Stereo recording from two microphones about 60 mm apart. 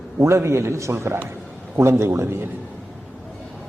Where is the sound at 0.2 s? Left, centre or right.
Right.